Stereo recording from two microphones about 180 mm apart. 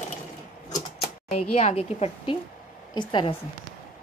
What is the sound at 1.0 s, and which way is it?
A woman's voice, 35° left (ahead or behind).